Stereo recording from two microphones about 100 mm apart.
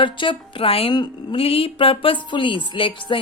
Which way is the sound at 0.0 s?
55° left (ahead or behind).